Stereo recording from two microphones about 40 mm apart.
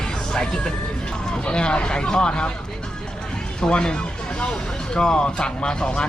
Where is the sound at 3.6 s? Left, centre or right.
Left.